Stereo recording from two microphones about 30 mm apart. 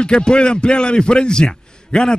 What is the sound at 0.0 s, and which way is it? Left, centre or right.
A man's voice, left.